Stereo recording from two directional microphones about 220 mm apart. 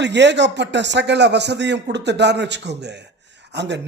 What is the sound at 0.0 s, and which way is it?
Speech, 50° right (ahead or behind).